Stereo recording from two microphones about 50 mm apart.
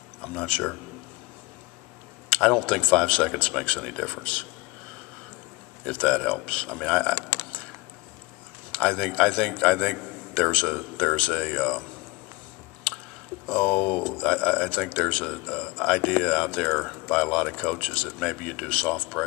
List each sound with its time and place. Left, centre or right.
0.2 s speech: centre
2.2 s a man's voice: centre
5.9 s a man's voice: left
7.2 s a sound: left
8.7 s a man's voice: centre
13.5 s a man's voice: centre